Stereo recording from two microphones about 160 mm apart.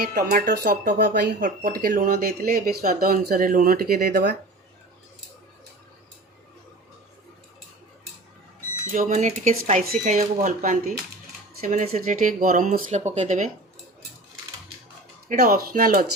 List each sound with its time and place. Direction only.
0.0 s speech: 60° right (ahead or behind)
8.9 s speech: 55° right (ahead or behind)
15.3 s speech: 60° right (ahead or behind)